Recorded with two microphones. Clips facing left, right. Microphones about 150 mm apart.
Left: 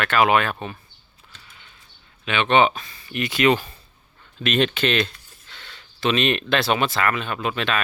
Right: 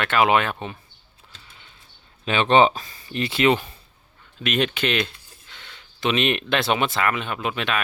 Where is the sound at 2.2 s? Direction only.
35° right (ahead or behind).